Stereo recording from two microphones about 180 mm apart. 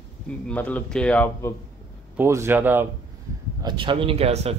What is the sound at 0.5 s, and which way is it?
Speech, 10° left (ahead or behind).